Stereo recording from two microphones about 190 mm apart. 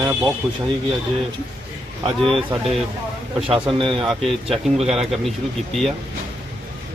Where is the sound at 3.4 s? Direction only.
25° right (ahead or behind).